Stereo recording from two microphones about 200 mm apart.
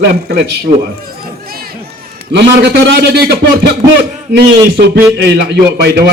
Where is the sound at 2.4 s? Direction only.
60° right (ahead or behind).